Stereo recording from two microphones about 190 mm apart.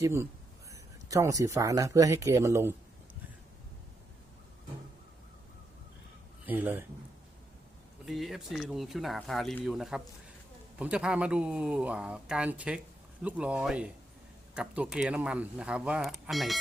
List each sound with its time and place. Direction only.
0.0 s speech: 15° right (ahead or behind)
6.4 s speech: 10° right (ahead or behind)
8.0 s speech: centre (ahead or behind)